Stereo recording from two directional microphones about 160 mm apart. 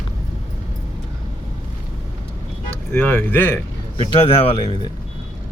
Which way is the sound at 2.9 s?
15° left (ahead or behind).